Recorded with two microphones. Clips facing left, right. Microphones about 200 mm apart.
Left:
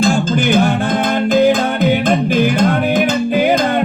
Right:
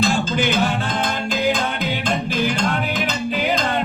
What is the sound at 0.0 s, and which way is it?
Music, 50° left (ahead or behind).